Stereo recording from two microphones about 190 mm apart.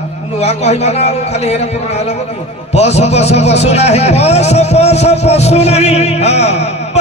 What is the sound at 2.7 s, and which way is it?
A man's voice, 35° left (ahead or behind).